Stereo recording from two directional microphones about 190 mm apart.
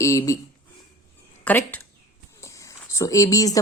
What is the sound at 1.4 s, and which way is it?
Speech, 10° left (ahead or behind).